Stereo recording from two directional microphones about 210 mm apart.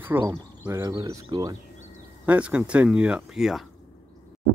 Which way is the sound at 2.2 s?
5° right (ahead or behind).